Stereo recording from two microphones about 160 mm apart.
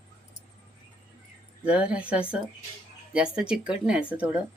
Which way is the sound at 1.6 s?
5° right (ahead or behind).